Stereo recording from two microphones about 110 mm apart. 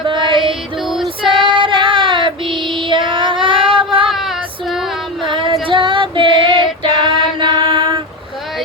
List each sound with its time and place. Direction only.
0.0 s music: 45° right (ahead or behind)
0.8 s female singing: 5° right (ahead or behind)
1.0 s child singing: 50° right (ahead or behind)
2.7 s female singing: 45° right (ahead or behind)
4.1 s female singing: centre (ahead or behind)
5.2 s music: 50° right (ahead or behind)
5.6 s child singing: 50° right (ahead or behind)